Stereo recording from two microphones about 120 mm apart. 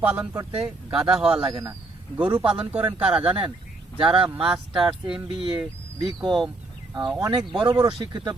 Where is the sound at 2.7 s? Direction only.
15° right (ahead or behind).